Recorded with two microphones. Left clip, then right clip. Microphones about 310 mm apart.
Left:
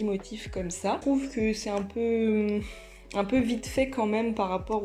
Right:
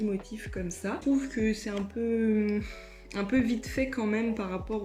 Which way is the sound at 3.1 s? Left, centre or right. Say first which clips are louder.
Left 2 dB; centre.